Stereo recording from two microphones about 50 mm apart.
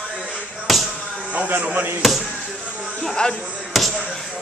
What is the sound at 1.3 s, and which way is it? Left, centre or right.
Speech, right.